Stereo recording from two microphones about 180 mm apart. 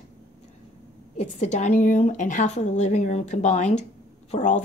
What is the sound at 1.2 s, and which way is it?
A woman's voice, 40° left (ahead or behind).